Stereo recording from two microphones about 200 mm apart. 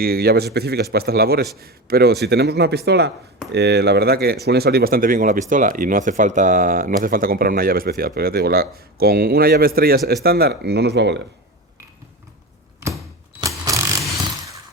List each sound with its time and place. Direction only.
0.0 s speech: 50° right (ahead or behind)